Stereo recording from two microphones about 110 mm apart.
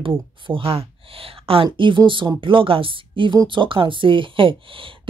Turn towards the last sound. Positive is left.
turn(degrees=-55)  # may be behind; listen again after turning